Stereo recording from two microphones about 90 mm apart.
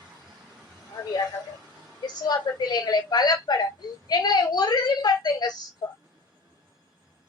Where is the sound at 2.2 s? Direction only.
50° left (ahead or behind).